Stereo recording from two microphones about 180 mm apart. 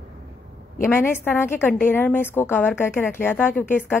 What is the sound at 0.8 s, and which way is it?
Speech, 10° left (ahead or behind).